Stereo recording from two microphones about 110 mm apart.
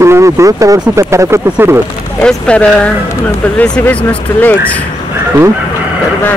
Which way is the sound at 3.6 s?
10° left (ahead or behind).